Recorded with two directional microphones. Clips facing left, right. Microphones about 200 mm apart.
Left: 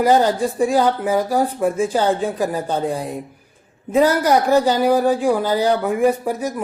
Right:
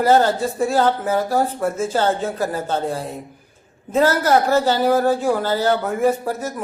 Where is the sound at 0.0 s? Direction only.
15° left (ahead or behind).